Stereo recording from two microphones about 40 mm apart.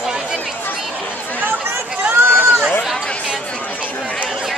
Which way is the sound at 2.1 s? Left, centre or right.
Right.